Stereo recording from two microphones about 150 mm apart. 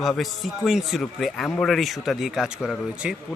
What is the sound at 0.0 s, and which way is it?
Speech, centre (ahead or behind).